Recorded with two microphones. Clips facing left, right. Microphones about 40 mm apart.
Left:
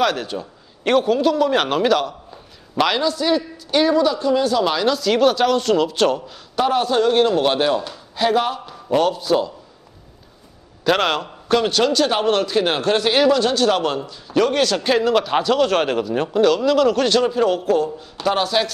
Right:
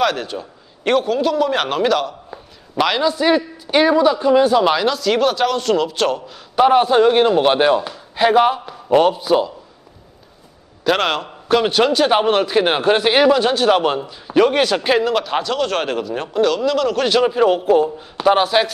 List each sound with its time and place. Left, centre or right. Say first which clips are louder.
0.0 s a man's voice: right 1 dB; centre
3.0 s a man's voice: right 3 dB; centre
4.8 s a man's voice: even; centre
6.5 s a man's voice: right 5 dB; right
10.8 s a man's voice: right 1 dB; centre